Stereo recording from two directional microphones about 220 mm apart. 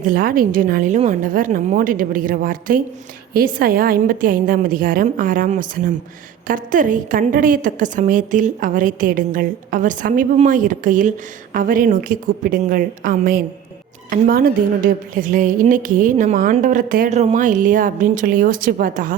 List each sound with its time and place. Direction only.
0.1 s a woman's voice: 40° right (ahead or behind)